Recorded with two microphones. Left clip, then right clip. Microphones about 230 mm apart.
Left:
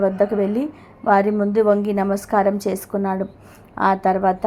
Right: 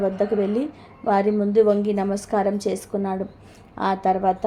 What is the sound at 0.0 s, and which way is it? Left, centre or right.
A woman's voice, left.